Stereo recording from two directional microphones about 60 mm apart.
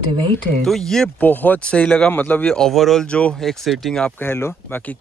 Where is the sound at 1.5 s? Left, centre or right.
Left.